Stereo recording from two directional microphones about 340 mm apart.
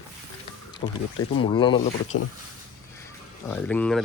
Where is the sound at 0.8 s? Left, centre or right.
Centre.